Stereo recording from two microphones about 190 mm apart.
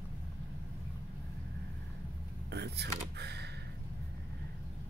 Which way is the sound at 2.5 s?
60° right (ahead or behind).